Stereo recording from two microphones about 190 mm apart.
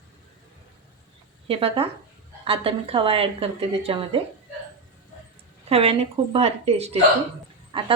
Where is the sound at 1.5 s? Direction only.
30° right (ahead or behind).